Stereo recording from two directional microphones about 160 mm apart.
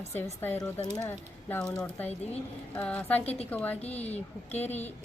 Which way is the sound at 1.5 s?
10° left (ahead or behind).